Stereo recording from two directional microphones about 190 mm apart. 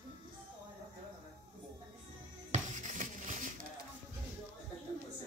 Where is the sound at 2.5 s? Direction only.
40° right (ahead or behind).